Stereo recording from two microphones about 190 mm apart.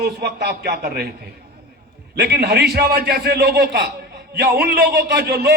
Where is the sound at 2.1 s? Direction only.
60° right (ahead or behind).